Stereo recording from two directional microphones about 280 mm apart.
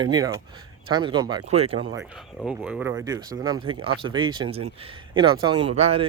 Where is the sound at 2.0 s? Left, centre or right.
Centre; by 6.1 s right.